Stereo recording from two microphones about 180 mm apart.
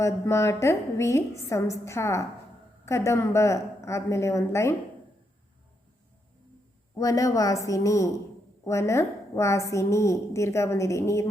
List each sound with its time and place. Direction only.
0.0 s a woman's voice: 15° left (ahead or behind)
6.9 s a woman's voice: 20° left (ahead or behind)